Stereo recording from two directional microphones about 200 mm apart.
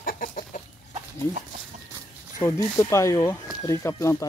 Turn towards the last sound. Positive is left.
turn(degrees=15)  # may be behind; listen again after turning